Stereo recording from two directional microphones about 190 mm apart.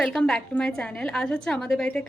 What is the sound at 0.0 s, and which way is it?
Speech, centre (ahead or behind).